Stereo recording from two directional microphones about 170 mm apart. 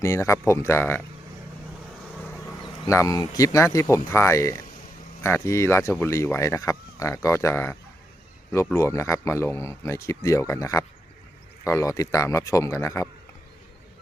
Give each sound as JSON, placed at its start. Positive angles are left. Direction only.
{"t": 0.0, "sound": "speech", "side_deg": 15}
{"t": 2.8, "sound": "speech", "side_deg": 20}